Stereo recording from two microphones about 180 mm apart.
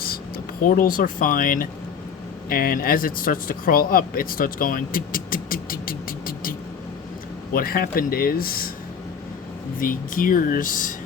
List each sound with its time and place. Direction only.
0.6 s speech: 50° left (ahead or behind)
7.5 s speech: 55° left (ahead or behind)
9.8 s speech: 50° left (ahead or behind)